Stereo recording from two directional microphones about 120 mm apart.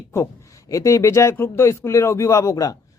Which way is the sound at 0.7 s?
25° left (ahead or behind).